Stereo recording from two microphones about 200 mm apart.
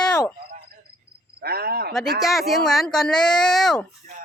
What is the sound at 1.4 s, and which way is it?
Speech, 50° right (ahead or behind).